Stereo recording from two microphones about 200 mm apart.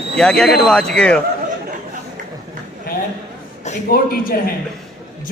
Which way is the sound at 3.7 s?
45° left (ahead or behind).